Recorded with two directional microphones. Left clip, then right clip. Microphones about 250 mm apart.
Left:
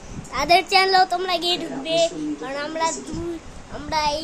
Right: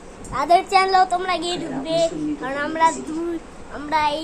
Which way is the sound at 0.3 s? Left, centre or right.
Centre.